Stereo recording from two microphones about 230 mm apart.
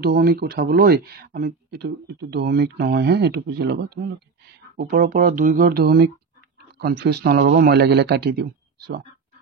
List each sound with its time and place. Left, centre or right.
0.0 s speech: right